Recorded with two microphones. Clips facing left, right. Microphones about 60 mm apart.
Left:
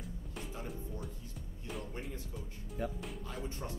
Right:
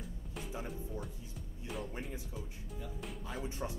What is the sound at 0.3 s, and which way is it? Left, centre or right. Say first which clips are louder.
Music: right 2 dB; centre.